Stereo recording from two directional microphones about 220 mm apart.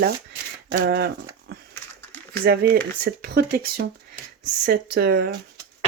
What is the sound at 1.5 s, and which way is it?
Pig, 45° right (ahead or behind).